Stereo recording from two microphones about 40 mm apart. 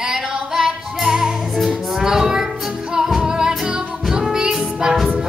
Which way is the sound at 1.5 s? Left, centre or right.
Centre.